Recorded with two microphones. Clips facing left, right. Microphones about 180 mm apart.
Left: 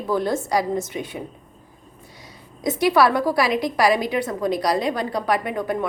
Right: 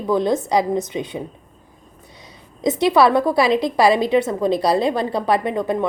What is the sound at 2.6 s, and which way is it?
A woman's voice, 20° right (ahead or behind).